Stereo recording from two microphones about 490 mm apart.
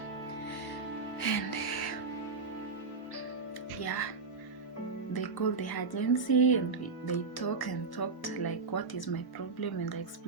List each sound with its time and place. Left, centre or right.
1.2 s music: left
3.8 s speech: left
5.1 s speech: left